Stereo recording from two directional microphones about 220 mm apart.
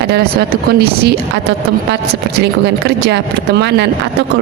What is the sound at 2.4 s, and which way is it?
Speech, 50° right (ahead or behind).